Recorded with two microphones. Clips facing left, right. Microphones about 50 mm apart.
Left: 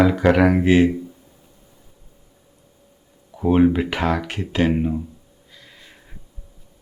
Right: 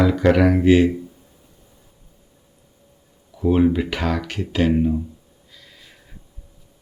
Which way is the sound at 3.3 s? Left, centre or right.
Left.